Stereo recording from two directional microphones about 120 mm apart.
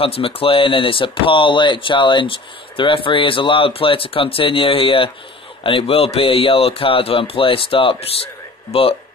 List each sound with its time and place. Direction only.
0.0 s speech: 50° left (ahead or behind)